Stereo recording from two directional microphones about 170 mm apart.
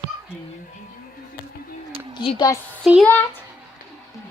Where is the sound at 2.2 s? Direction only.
30° left (ahead or behind).